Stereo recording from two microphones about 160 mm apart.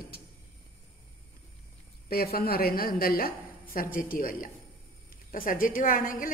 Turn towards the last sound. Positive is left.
turn(degrees=60)  # may be behind; listen again after turning